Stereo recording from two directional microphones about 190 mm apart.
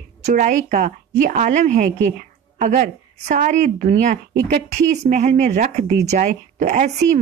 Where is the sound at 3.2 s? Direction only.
40° right (ahead or behind).